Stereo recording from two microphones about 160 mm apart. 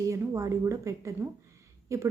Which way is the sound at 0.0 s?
20° right (ahead or behind).